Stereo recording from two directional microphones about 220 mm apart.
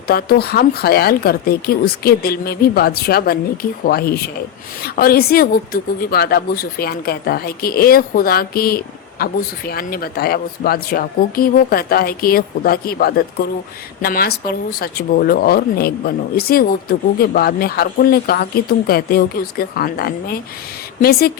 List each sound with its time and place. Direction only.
0.1 s a woman's voice: 45° left (ahead or behind)